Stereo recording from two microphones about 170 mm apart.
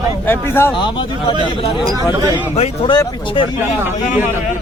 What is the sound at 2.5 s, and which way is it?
Speech, 40° left (ahead or behind).